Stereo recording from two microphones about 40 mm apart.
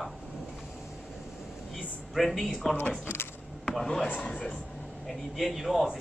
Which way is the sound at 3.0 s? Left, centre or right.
Left.